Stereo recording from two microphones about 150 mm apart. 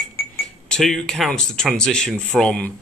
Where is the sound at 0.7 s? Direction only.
5° left (ahead or behind).